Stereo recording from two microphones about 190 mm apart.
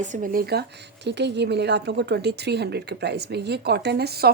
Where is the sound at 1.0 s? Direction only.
65° right (ahead or behind).